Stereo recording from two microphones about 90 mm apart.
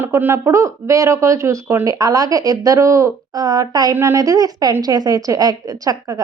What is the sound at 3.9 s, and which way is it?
Speech, 35° right (ahead or behind).